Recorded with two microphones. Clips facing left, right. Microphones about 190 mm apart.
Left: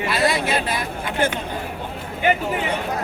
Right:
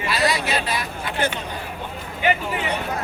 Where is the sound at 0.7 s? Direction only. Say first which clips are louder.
Left 1 dB; 50° left (ahead or behind).